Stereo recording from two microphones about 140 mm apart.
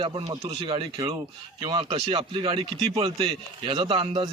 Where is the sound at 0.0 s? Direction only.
35° right (ahead or behind).